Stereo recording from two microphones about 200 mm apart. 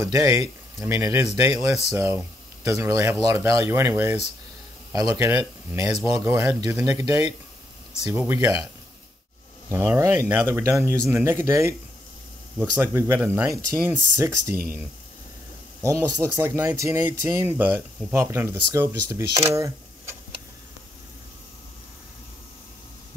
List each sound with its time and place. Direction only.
0.0 s speech: 15° right (ahead or behind)
9.7 s speech: 15° right (ahead or behind)
15.8 s speech: 15° right (ahead or behind)